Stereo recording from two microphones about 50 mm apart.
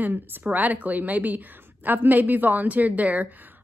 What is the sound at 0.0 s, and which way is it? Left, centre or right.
Speech, right.